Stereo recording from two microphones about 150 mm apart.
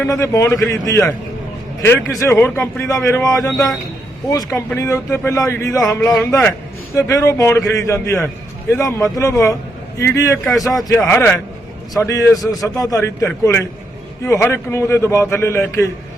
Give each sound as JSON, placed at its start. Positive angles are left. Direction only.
{"t": 0.1, "sound": "speech", "side_deg": 20}
{"t": 10.4, "sound": "speech", "side_deg": 0}
{"t": 11.1, "sound": "speech", "side_deg": 15}